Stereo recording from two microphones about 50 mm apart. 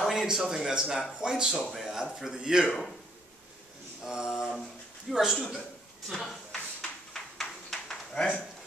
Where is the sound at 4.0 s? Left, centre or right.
Centre.